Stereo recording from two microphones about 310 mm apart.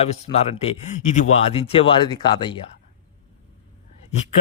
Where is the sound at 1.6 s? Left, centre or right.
Centre.